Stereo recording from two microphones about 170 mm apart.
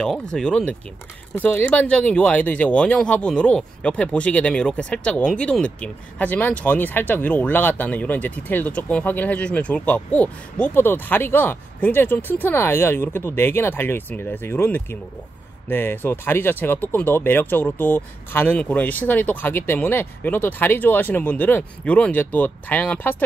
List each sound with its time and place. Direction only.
0.0 s speech: 5° left (ahead or behind)